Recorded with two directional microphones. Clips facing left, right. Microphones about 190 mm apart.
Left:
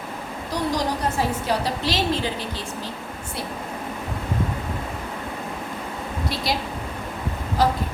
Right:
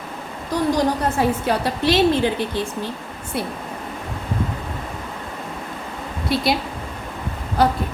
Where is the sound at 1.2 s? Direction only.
55° right (ahead or behind).